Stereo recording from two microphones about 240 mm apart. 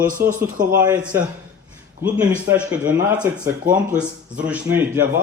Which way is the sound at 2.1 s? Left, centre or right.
Centre.